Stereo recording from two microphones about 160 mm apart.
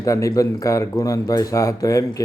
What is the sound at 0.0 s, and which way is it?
Speech, 20° left (ahead or behind).